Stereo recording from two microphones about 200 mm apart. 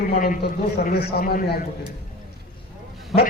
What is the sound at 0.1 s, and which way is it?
A man's voice, 40° left (ahead or behind).